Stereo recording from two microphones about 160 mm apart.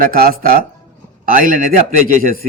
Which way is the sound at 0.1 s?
65° right (ahead or behind).